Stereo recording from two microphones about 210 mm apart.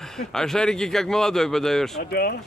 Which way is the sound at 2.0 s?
45° left (ahead or behind).